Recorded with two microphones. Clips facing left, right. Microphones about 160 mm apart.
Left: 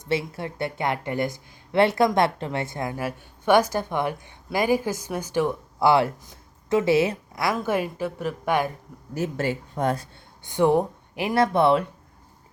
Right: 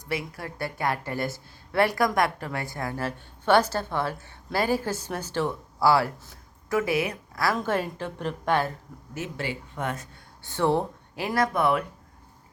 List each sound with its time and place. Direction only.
0.0 s a woman's voice: 25° left (ahead or behind)
7.5 s speech: 10° left (ahead or behind)
9.1 s speech: 40° left (ahead or behind)
10.4 s speech: 15° left (ahead or behind)